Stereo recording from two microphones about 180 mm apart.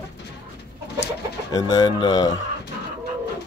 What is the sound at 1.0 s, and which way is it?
Speech, 20° left (ahead or behind).